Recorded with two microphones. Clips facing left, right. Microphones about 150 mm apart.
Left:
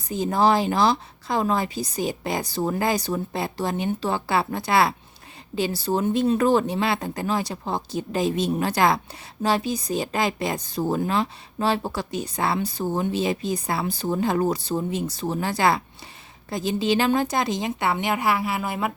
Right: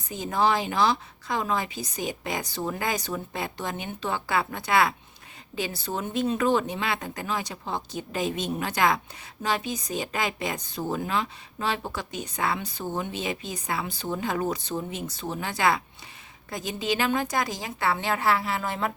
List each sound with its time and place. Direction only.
0.1 s a woman's voice: 35° left (ahead or behind); by 18.9 s 10° left (ahead or behind)